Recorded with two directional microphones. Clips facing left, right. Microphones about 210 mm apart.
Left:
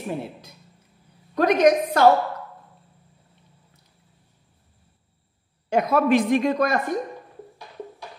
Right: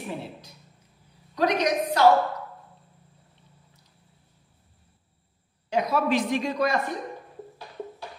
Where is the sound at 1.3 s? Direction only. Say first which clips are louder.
Left 6 dB; 50° left (ahead or behind).